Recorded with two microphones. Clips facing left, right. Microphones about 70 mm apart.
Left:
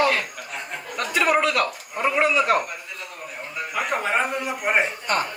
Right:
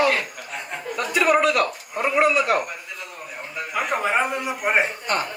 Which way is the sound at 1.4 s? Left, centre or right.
Centre.